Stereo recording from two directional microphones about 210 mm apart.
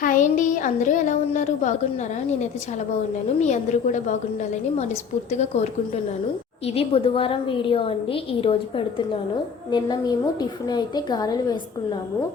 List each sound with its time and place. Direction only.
0.0 s a woman's voice: 40° left (ahead or behind)
3.4 s a woman's voice: 35° left (ahead or behind)
5.5 s a woman's voice: 30° left (ahead or behind)